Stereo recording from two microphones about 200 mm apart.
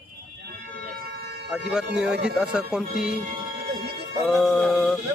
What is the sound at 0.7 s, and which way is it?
Siren, 55° right (ahead or behind).